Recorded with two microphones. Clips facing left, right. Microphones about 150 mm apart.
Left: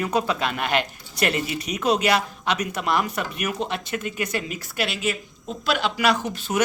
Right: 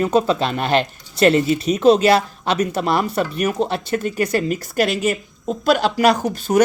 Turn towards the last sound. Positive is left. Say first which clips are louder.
# right 6 dB
turn(degrees=-40)  # may be behind; listen again after turning